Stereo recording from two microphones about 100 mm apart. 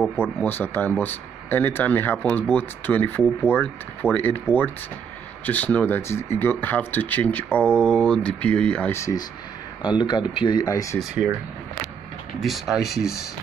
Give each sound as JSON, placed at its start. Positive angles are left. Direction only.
{"t": 0.4, "sound": "speech", "side_deg": 20}
{"t": 9.8, "sound": "speech", "side_deg": 50}
{"t": 10.6, "sound": "speech", "side_deg": 35}
{"t": 12.4, "sound": "speech", "side_deg": 0}